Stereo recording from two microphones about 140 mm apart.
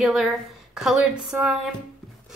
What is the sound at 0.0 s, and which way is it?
A woman's voice, centre (ahead or behind).